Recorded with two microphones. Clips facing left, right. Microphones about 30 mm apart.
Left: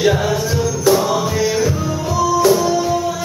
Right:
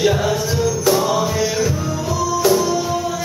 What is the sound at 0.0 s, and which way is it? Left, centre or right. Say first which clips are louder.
Music: left 1 dB; centre.